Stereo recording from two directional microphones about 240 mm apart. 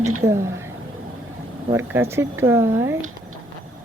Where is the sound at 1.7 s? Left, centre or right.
Centre.